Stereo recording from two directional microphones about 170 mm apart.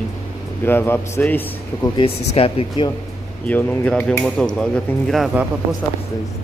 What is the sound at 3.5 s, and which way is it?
Speech, 10° left (ahead or behind).